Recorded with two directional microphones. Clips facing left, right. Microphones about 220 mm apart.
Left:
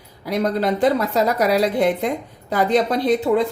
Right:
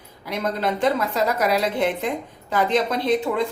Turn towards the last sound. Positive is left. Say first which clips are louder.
# left 4 dB
turn(degrees=35)  # may be behind; listen again after turning